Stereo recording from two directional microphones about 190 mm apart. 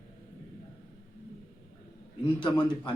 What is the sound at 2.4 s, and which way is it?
Speech, 25° left (ahead or behind).